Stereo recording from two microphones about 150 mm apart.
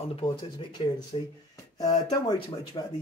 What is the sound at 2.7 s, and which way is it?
Speech, 30° left (ahead or behind).